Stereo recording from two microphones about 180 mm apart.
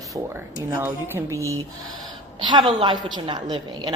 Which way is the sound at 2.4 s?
25° right (ahead or behind).